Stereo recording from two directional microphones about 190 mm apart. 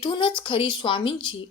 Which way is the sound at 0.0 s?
25° left (ahead or behind).